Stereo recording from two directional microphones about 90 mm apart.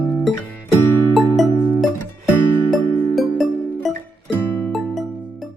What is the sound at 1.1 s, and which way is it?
Music, centre (ahead or behind).